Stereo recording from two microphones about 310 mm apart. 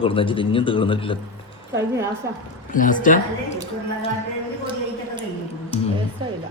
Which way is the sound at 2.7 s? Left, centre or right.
Left.